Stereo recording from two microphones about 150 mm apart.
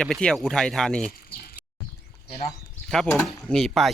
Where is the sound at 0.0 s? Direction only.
5° left (ahead or behind).